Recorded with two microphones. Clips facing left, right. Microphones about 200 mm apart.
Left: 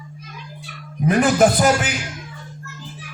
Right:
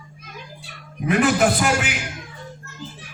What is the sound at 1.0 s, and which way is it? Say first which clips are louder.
Speech: left 3 dB; 40° left (ahead or behind).